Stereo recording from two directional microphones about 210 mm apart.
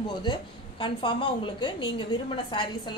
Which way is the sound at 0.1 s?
20° left (ahead or behind).